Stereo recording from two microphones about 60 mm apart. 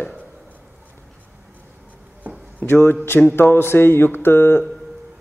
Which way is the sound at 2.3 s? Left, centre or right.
Right.